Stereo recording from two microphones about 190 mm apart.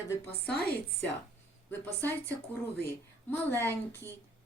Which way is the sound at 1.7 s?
10° left (ahead or behind).